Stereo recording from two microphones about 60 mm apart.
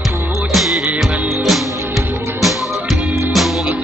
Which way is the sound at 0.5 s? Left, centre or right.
Centre.